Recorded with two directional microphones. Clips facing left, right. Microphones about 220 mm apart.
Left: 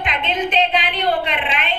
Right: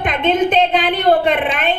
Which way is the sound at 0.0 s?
50° right (ahead or behind).